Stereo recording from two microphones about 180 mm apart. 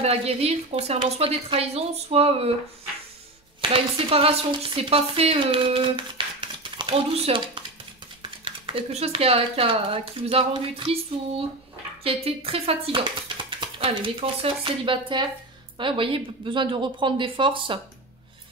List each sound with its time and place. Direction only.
0.0 s speech: 35° right (ahead or behind)
3.7 s speech: 30° right (ahead or behind)
8.5 s speech: 30° right (ahead or behind)